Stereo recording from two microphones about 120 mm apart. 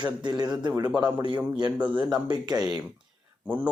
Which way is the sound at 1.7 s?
10° right (ahead or behind).